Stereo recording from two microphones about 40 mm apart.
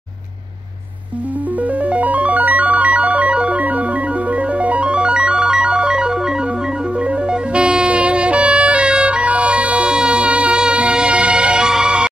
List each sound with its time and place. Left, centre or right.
1.8 s music: right; by 12.1 s centre